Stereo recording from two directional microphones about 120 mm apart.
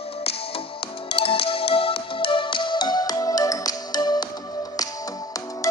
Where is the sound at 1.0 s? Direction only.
50° left (ahead or behind); by 4.3 s 35° left (ahead or behind).